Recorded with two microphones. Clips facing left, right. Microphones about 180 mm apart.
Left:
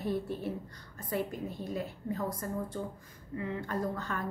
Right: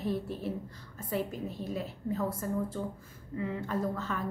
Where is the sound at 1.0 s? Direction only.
5° right (ahead or behind).